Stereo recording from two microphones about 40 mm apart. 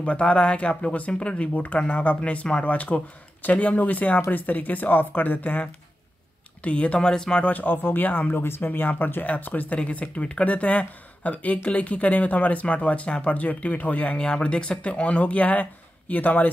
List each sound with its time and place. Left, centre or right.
0.0 s speech: left
1.5 s speech: left
6.6 s speech: left
7.1 s speech: centre
7.4 s speech: left
8.4 s speech: left
9.8 s speech: left
14.1 s speech: left